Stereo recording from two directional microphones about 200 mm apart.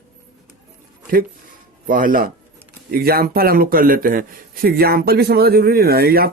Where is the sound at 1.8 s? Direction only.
45° right (ahead or behind).